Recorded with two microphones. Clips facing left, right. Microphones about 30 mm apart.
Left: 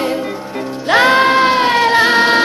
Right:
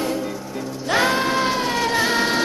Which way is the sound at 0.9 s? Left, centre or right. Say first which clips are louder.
Left 9 dB; left.